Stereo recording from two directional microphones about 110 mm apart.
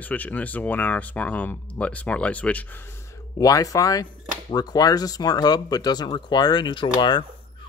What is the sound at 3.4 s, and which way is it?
Speech, 30° left (ahead or behind).